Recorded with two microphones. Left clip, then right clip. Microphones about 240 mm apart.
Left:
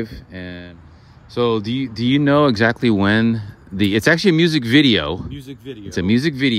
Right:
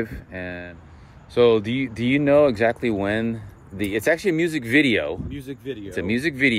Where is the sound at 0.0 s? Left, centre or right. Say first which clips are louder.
Even; centre.